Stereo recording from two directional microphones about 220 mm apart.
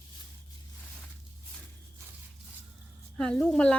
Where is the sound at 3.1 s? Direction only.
Centre (ahead or behind).